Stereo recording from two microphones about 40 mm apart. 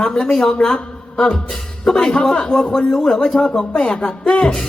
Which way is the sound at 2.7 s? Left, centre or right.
Left.